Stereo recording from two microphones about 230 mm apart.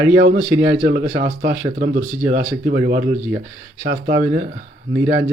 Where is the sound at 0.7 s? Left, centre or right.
Right.